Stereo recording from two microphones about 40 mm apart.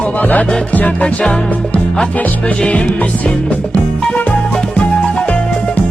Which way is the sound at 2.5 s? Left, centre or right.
Left.